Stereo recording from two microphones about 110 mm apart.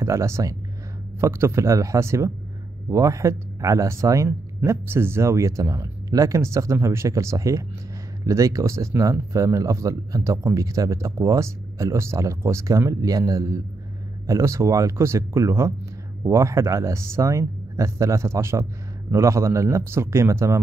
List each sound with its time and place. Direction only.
0.0 s speech: 25° right (ahead or behind)